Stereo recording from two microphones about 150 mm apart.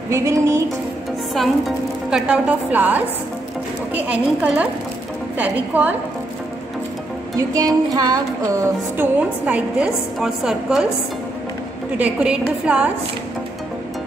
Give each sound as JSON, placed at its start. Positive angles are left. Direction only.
{"t": 0.1, "sound": "child singing", "side_deg": -20}
{"t": 2.0, "sound": "a woman's voice", "side_deg": -5}
{"t": 7.3, "sound": "child singing", "side_deg": -25}
{"t": 8.9, "sound": "a woman's voice", "side_deg": -10}
{"t": 12.0, "sound": "a woman's voice", "side_deg": -5}